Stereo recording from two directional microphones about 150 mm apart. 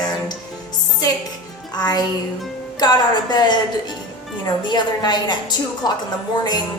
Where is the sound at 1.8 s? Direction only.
25° left (ahead or behind).